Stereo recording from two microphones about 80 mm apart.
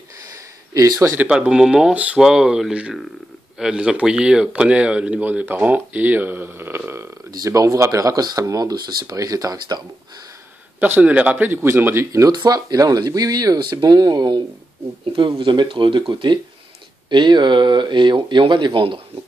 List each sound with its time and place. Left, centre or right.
0.2 s a sound: right
1.3 s speech: centre; by 6.8 s right
7.2 s speech: right
10.8 s speech: centre; by 12.3 s right
12.3 s speech: right
15.1 s speech: right